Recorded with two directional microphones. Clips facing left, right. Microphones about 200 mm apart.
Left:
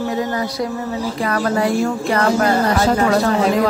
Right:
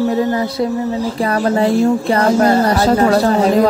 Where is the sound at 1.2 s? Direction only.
30° right (ahead or behind).